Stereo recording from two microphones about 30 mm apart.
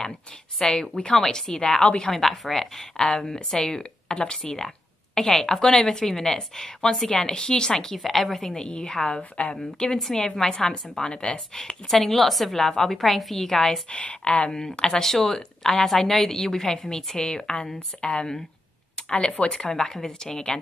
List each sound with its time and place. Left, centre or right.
0.6 s a woman's voice: left
2.0 s a woman's voice: centre; by 7.7 s left
7.7 s a woman's voice: centre
8.0 s a woman's voice: centre
8.5 s a woman's voice: left
10.3 s a woman's voice: centre
10.7 s a woman's voice: left
11.9 s a woman's voice: centre
12.5 s a woman's voice: centre
13.0 s a woman's voice: centre
13.8 s speech: left
14.5 s a woman's voice: centre
19.7 s a woman's voice: centre